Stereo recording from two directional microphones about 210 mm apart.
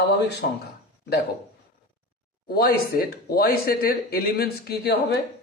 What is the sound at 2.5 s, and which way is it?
Speech, 45° left (ahead or behind).